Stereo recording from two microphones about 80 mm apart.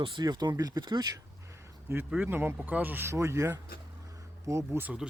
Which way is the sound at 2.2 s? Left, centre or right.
Right.